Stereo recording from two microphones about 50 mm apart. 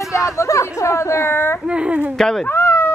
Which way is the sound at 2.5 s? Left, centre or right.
Left.